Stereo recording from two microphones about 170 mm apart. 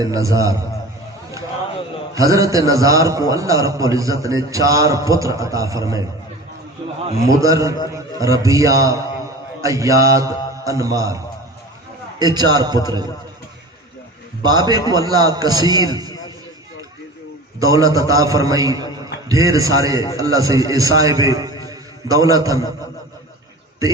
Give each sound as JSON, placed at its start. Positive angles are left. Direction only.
{"t": 0.0, "sound": "a man's voice", "side_deg": -20}
{"t": 2.1, "sound": "a man's voice", "side_deg": -20}
{"t": 7.3, "sound": "a man's voice", "side_deg": -20}
{"t": 12.2, "sound": "a man's voice", "side_deg": -25}
{"t": 14.4, "sound": "a man's voice", "side_deg": -25}
{"t": 17.6, "sound": "a man's voice", "side_deg": -20}